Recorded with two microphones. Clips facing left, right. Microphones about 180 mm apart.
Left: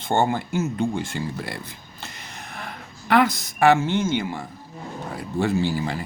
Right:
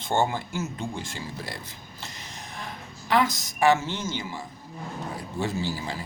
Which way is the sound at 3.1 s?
60° left (ahead or behind).